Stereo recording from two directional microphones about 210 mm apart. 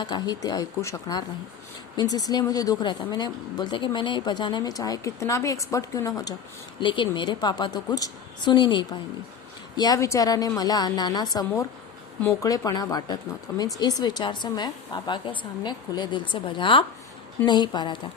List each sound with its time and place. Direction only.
0.0 s a woman's voice: 20° left (ahead or behind)